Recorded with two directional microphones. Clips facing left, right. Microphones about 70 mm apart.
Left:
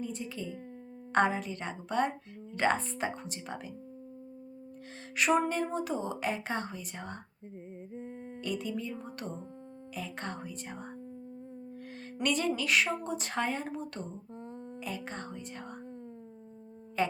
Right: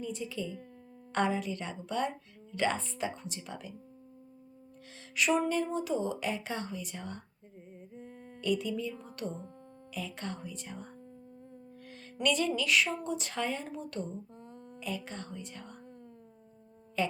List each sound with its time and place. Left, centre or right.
0.0 s a woman's voice: left
5.1 s a woman's voice: left
12.1 s a woman's voice: left
17.0 s a woman's voice: left